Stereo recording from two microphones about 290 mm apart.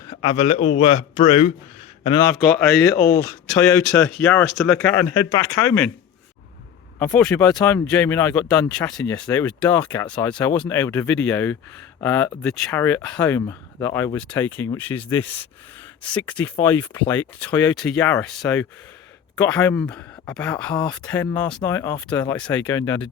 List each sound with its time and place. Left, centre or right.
0.1 s a man's voice: centre
2.0 s speech: centre
7.0 s speech: centre